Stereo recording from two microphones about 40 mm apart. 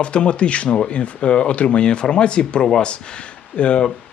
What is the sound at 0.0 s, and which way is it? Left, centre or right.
Speech, left.